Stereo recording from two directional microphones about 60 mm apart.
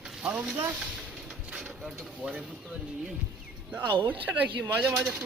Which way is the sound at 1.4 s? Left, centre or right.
Centre.